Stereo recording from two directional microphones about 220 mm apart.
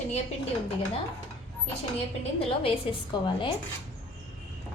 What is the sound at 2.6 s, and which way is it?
Speech, 20° left (ahead or behind).